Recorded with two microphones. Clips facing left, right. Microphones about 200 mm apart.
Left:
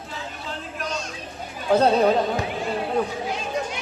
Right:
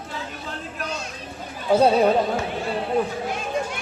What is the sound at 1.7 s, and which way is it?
Speech, 10° right (ahead or behind).